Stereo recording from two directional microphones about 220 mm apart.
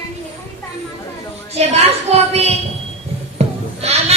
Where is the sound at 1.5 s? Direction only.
30° right (ahead or behind).